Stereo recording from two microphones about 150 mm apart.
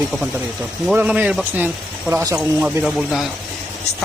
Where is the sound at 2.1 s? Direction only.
20° right (ahead or behind).